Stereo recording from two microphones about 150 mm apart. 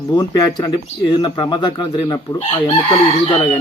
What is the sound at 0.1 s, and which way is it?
Speech, 25° left (ahead or behind).